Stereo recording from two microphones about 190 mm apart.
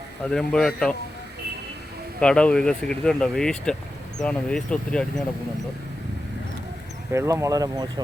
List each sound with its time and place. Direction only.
0.3 s speech: 5° left (ahead or behind)
2.2 s speech: 5° left (ahead or behind)
7.1 s speech: 15° right (ahead or behind)